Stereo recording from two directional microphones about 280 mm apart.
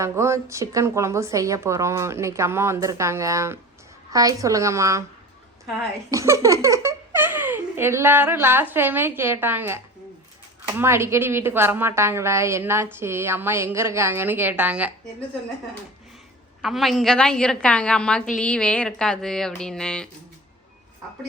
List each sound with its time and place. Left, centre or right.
0.0 s a woman's voice: centre
6.1 s a woman's voice: centre
16.6 s speech: centre